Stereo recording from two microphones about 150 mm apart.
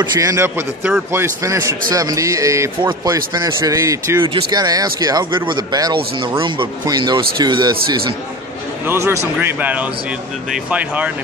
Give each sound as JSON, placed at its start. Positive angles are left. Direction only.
{"t": 0.0, "sound": "speech", "side_deg": -25}
{"t": 2.8, "sound": "speech", "side_deg": -30}
{"t": 4.3, "sound": "speech", "side_deg": -30}
{"t": 8.8, "sound": "speech", "side_deg": -20}